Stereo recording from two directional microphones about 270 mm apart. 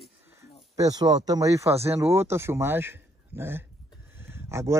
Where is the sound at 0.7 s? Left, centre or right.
Centre.